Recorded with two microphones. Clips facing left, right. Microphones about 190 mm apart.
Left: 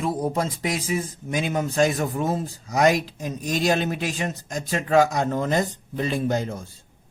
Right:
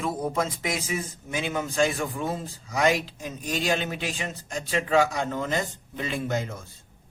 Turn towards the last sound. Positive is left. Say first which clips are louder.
# left 5 dB
turn(degrees=35)  # may be behind; listen again after turning